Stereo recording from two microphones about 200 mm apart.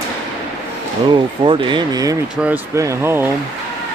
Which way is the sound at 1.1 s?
25° right (ahead or behind).